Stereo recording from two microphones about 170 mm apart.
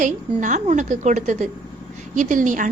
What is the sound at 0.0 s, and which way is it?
A woman's voice, 45° right (ahead or behind).